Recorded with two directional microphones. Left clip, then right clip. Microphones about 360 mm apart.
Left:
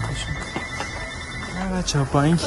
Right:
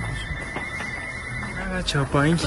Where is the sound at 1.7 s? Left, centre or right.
Centre.